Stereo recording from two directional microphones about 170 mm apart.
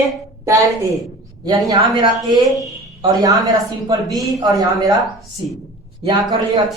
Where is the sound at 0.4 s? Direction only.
20° right (ahead or behind).